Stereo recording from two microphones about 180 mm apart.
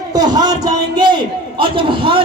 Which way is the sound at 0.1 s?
20° right (ahead or behind).